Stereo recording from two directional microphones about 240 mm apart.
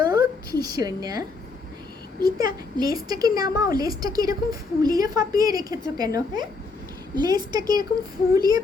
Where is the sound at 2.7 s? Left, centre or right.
Centre.